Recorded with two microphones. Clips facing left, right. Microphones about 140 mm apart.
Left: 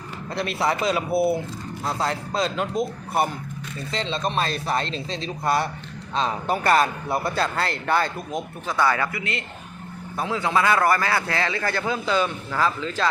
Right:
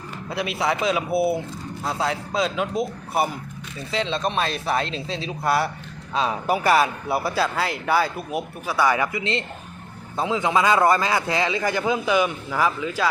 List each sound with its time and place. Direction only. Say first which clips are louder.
0.3 s a man's voice: even; 5° right (ahead or behind)